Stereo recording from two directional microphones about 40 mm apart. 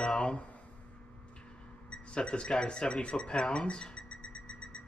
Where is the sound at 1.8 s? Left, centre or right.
Left.